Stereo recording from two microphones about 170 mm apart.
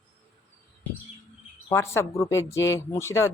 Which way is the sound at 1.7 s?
15° left (ahead or behind).